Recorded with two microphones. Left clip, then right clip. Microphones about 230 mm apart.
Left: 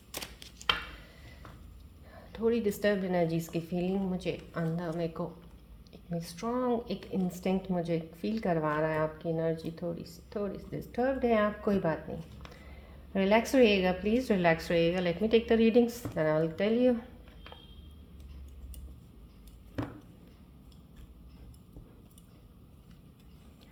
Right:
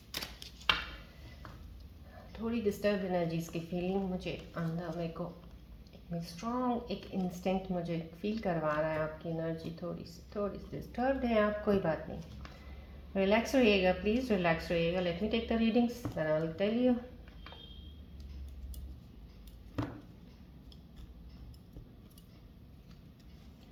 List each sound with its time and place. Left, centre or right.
2.3 s a woman's voice: left
13.1 s a woman's voice: left